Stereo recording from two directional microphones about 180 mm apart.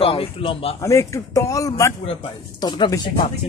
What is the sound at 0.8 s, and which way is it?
Speech, 15° left (ahead or behind).